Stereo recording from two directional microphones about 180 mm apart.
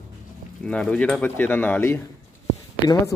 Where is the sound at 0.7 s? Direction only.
5° left (ahead or behind).